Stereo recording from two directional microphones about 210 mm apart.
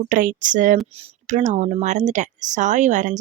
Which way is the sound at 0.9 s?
30° right (ahead or behind).